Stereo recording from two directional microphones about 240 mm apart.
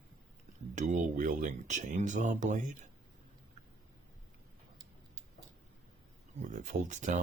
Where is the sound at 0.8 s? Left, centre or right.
Right.